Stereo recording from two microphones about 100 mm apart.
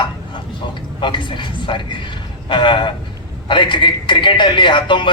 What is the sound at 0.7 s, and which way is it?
A man's voice, 50° left (ahead or behind).